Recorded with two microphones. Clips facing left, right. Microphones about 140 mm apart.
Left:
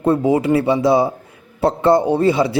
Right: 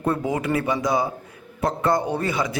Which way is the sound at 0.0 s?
25° left (ahead or behind).